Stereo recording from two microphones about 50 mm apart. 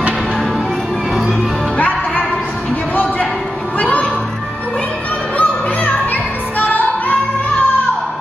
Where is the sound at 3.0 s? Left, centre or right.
Left.